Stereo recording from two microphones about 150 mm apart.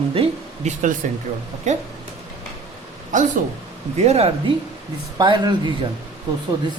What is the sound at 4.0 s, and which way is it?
Speech, 45° right (ahead or behind).